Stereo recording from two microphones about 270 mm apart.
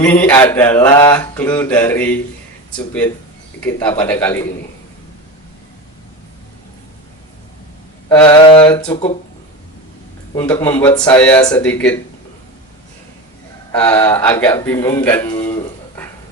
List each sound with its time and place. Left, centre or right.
0.0 s mantra: centre
2.7 s speech: centre
3.8 s mantra: centre
8.1 s mantra: centre
8.4 s mantra: centre
8.9 s speech: left
10.3 s mantra: centre
11.0 s speech: centre
13.7 s mantra: centre